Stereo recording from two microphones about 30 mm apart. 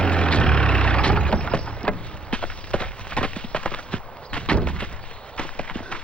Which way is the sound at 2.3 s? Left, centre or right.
Left.